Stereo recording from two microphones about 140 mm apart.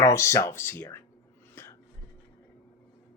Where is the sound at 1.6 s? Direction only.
15° left (ahead or behind).